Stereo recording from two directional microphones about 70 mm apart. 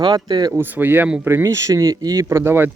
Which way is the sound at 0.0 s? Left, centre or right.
Right.